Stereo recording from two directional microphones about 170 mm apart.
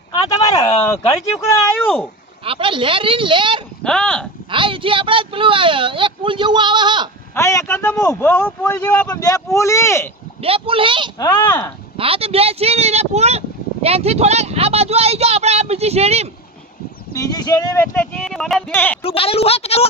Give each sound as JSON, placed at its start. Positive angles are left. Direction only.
{"t": 0.1, "sound": "a sound", "side_deg": 20}
{"t": 1.5, "sound": "speech", "side_deg": 15}
{"t": 2.4, "sound": "a woman's voice", "side_deg": -30}
{"t": 3.8, "sound": "speech", "side_deg": 5}
{"t": 4.4, "sound": "a woman's voice", "side_deg": -30}
{"t": 7.3, "sound": "speech", "side_deg": 15}
{"t": 9.0, "sound": "speech", "side_deg": 20}
{"t": 10.4, "sound": "a woman's voice", "side_deg": -35}
{"t": 11.3, "sound": "speech", "side_deg": 10}
{"t": 11.9, "sound": "a woman's voice", "side_deg": -35}
{"t": 17.2, "sound": "speech", "side_deg": 20}
{"t": 19.0, "sound": "a woman's voice", "side_deg": 35}